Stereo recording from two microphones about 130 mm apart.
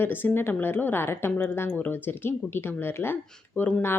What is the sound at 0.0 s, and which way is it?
A woman's voice, 15° left (ahead or behind).